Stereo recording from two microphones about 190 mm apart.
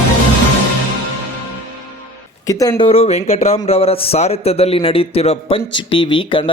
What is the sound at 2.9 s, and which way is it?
A man's voice, 35° left (ahead or behind).